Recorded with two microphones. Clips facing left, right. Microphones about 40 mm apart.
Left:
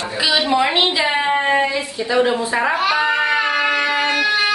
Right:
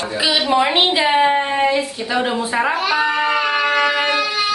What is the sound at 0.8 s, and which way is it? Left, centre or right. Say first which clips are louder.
Speech: right 1 dB; right.